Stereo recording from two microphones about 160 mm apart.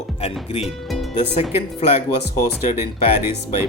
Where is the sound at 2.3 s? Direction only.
50° left (ahead or behind).